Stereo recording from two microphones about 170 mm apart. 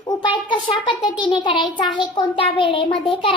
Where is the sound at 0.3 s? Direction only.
30° left (ahead or behind).